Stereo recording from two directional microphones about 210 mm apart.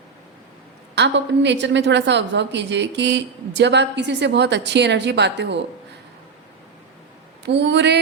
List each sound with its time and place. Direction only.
0.9 s a woman's voice: 55° right (ahead or behind)
7.4 s a woman's voice: 55° right (ahead or behind)